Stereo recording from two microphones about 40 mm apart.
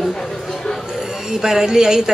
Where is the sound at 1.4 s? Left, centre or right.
Centre.